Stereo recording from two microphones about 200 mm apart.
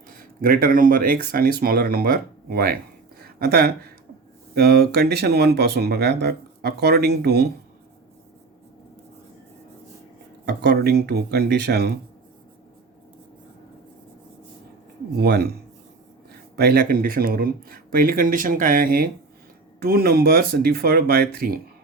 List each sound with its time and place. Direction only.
0.2 s speech: 45° right (ahead or behind)
3.2 s a sound: 50° right (ahead or behind)
4.5 s speech: 50° right (ahead or behind)
10.4 s speech: 55° right (ahead or behind)
15.2 s speech: 50° right (ahead or behind)
16.6 s speech: 50° right (ahead or behind)